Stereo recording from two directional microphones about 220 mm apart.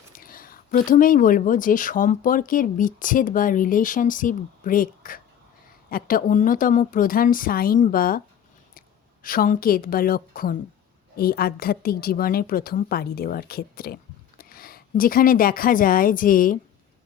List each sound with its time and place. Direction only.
0.1 s speech: 40° left (ahead or behind)
9.2 s a woman's voice: 40° left (ahead or behind)